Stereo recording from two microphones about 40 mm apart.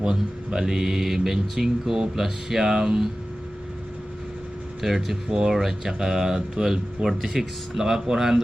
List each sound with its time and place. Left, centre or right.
0.0 s speech: centre
4.8 s speech: centre
5.3 s speech: centre
5.5 s speech: centre